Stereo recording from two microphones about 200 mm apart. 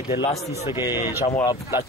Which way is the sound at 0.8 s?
20° left (ahead or behind).